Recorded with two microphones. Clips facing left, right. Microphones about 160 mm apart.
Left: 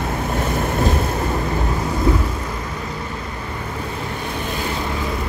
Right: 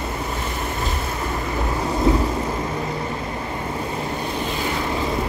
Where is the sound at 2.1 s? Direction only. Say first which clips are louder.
Right 1 dB; 25° right (ahead or behind).